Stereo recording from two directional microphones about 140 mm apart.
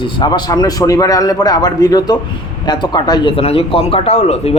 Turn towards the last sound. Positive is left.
turn(degrees=50)  # may be behind; listen again after turning